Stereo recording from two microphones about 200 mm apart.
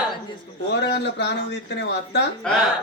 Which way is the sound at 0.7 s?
60° left (ahead or behind).